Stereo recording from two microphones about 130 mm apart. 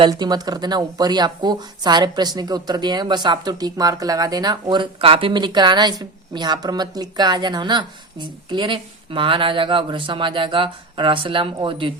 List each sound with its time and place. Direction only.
0.1 s speech: 30° right (ahead or behind)